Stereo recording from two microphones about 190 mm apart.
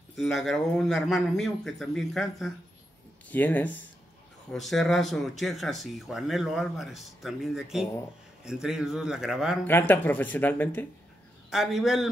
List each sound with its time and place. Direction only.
0.1 s a man's voice: centre (ahead or behind)
9.7 s speech: 10° left (ahead or behind)
11.5 s a man's voice: centre (ahead or behind)